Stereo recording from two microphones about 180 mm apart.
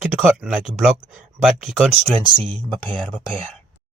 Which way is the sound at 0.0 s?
5° right (ahead or behind).